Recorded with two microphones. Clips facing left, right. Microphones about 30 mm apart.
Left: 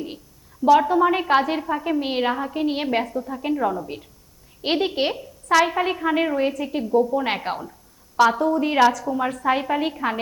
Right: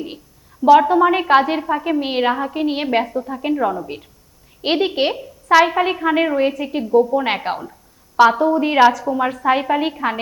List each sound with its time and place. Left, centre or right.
0.6 s a woman's voice: centre